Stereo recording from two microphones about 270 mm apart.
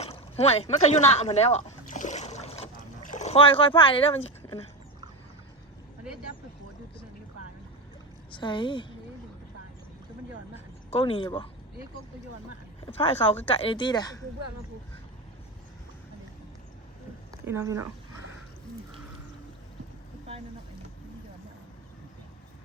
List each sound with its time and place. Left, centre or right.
0.0 s a sound: left
8.3 s a woman's voice: centre
10.9 s speech: left
12.8 s speech: left
17.3 s speech: centre